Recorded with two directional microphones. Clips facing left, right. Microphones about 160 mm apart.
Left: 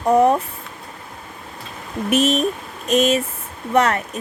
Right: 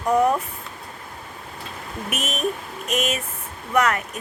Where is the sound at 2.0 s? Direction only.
30° left (ahead or behind).